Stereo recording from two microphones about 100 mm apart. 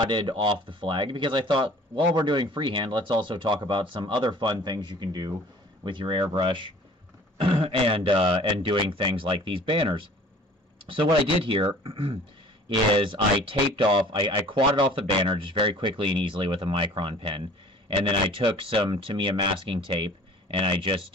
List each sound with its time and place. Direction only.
0.0 s speech: 50° right (ahead or behind)
5.9 s speech: 55° right (ahead or behind)
7.3 s speech: 70° right (ahead or behind)
11.4 s speech: 65° right (ahead or behind)